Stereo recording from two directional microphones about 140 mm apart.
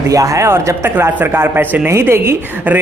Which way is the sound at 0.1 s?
25° right (ahead or behind).